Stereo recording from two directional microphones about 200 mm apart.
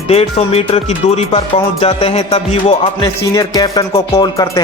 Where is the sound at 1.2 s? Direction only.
30° left (ahead or behind).